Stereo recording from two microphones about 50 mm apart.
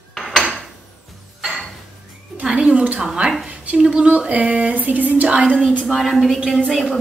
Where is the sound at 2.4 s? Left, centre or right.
Right.